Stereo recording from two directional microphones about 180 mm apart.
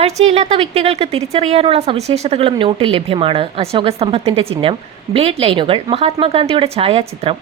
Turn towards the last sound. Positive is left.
turn(degrees=-30)  # may be behind; listen again after turning